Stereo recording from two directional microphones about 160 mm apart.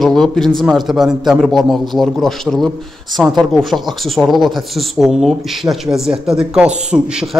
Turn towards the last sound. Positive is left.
turn(degrees=-5)  # may be behind; listen again after turning